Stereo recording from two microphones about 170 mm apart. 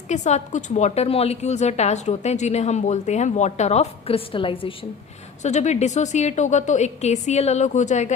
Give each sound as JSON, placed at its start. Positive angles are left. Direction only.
{"t": 0.1, "sound": "a woman's voice", "side_deg": 45}
{"t": 5.4, "sound": "a woman's voice", "side_deg": 45}